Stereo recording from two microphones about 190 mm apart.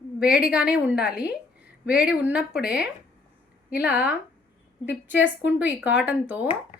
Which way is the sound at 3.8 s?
10° right (ahead or behind).